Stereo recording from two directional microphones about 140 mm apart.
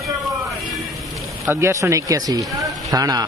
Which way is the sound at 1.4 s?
20° right (ahead or behind).